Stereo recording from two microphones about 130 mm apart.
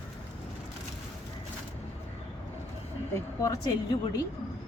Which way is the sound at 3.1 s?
25° left (ahead or behind).